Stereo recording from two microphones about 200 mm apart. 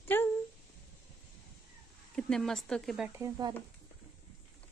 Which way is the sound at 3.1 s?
20° right (ahead or behind).